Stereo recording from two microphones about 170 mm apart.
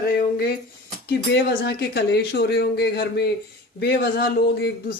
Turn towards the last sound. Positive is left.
turn(degrees=70)  # may be behind; listen again after turning